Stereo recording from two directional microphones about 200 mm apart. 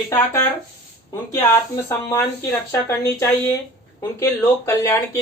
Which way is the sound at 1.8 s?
15° left (ahead or behind).